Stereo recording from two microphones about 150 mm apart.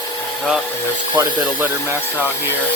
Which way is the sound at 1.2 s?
15° right (ahead or behind).